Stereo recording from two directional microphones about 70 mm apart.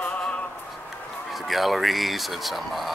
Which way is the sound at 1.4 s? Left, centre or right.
Centre.